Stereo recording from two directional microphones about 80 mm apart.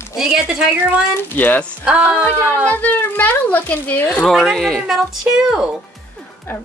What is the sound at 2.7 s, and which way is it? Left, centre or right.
Speech, left.